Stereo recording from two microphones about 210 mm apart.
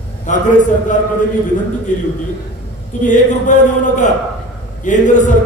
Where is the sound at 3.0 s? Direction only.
35° left (ahead or behind).